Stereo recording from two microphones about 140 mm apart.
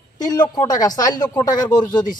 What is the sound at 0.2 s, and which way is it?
Speech, 30° left (ahead or behind).